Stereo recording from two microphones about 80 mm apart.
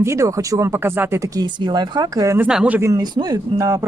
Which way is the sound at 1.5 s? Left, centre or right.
Right.